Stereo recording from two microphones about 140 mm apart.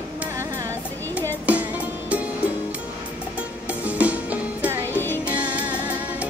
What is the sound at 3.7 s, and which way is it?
Music, 10° right (ahead or behind).